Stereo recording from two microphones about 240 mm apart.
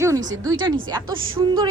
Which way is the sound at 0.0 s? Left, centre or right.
Centre.